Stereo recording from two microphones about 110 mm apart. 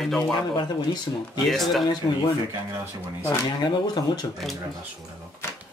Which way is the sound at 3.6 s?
40° left (ahead or behind).